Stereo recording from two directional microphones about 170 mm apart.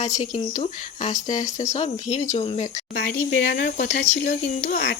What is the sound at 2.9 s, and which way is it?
Speech, 90° left.